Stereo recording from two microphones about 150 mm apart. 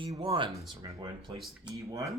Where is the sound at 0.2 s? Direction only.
35° right (ahead or behind).